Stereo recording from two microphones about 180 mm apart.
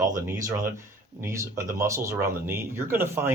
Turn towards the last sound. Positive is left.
turn(degrees=-10)  # may be behind; listen again after turning